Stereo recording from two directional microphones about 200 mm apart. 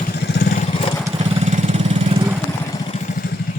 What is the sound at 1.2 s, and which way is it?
Lawn mower, 30° right (ahead or behind).